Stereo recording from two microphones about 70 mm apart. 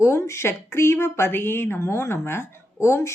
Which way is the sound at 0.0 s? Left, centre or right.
Left.